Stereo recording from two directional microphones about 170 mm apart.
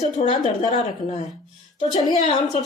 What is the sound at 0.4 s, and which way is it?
Speech, 45° left (ahead or behind).